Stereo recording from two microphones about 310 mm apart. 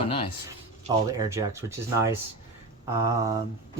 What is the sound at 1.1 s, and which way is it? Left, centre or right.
Speech, centre.